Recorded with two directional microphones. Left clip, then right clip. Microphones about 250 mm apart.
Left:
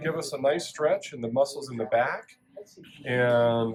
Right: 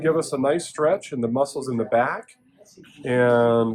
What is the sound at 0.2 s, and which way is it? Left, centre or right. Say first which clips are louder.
Speech: right 4 dB; centre.